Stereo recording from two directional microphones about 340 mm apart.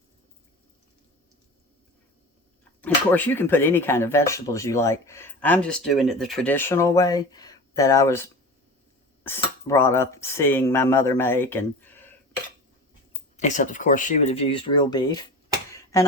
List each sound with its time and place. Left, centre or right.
2.8 s speech: centre
13.3 s speech: left
15.7 s a sound: centre